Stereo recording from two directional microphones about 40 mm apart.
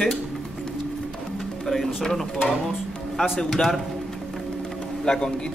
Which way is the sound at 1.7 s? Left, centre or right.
Centre.